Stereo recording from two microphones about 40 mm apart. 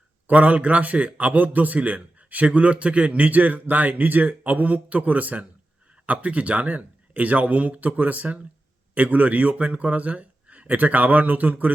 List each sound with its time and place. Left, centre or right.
0.3 s a man's voice: right